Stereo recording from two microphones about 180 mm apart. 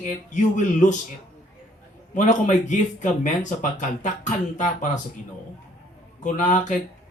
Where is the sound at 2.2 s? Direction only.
45° left (ahead or behind).